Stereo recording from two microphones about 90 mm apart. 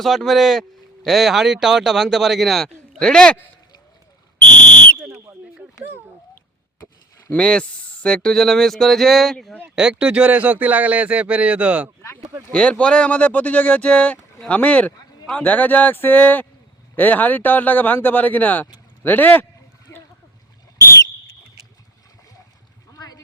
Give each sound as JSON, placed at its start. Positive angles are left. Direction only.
{"t": 0.0, "sound": "speech", "side_deg": 0}
{"t": 7.3, "sound": "speech", "side_deg": 10}
{"t": 9.7, "sound": "speech", "side_deg": -10}
{"t": 12.5, "sound": "speech", "side_deg": 10}
{"t": 19.9, "sound": "a sound", "side_deg": 35}
{"t": 22.9, "sound": "a sound", "side_deg": 45}